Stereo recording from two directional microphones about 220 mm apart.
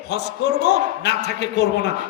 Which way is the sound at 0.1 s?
50° left (ahead or behind).